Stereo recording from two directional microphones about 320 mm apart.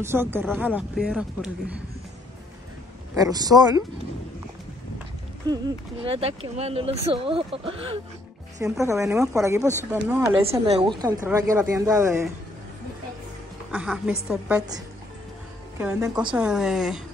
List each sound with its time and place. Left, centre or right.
0.0 s speech: centre
3.2 s speech: centre
6.0 s speech: centre
10.4 s speech: centre
13.7 s speech: centre
15.8 s speech: centre